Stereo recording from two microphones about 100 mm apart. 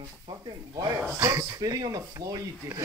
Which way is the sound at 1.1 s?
25° right (ahead or behind).